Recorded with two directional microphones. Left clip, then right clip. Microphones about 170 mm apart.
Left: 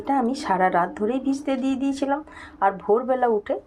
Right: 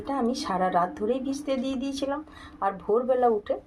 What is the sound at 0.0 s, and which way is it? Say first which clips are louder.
Speech: left 5 dB; 25° left (ahead or behind).